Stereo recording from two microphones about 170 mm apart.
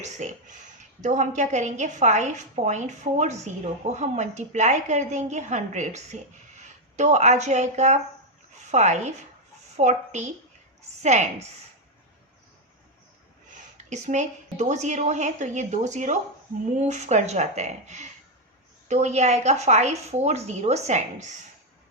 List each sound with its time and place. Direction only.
0.0 s a woman's voice: 45° right (ahead or behind)
13.7 s a woman's voice: 45° right (ahead or behind)